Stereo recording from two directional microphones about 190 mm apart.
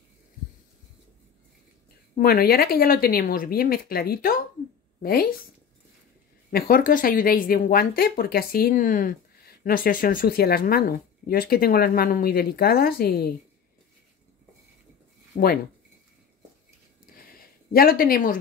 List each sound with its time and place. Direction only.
2.1 s speech: 50° left (ahead or behind)
6.5 s speech: 45° left (ahead or behind)
15.3 s speech: 50° left (ahead or behind)
17.3 s a sound: 50° left (ahead or behind)